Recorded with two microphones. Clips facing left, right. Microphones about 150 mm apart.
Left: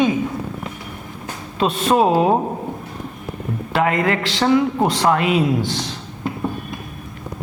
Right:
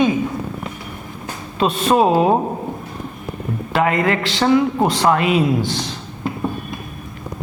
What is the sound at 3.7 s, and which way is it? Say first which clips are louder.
A woman's voice: right 1 dB; 15° right (ahead or behind).